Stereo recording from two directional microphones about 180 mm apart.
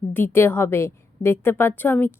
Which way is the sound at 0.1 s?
10° left (ahead or behind).